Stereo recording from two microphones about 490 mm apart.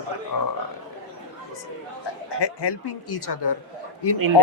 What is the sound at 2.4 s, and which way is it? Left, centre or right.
A woman's voice, left.